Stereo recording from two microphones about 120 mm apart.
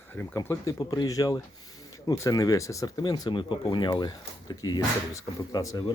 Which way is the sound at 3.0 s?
40° left (ahead or behind).